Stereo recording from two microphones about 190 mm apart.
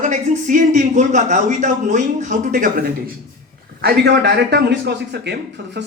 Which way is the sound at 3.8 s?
55° right (ahead or behind).